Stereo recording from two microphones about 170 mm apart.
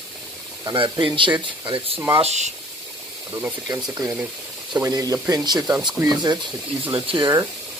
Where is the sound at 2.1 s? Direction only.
40° right (ahead or behind).